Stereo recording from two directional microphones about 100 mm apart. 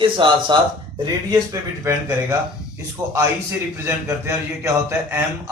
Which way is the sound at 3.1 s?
25° right (ahead or behind).